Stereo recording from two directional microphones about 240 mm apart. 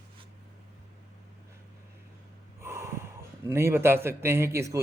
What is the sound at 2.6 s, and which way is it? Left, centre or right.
A man's voice, centre.